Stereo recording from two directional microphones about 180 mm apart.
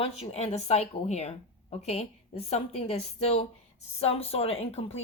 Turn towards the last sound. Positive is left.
turn(degrees=35)  # may be behind; listen again after turning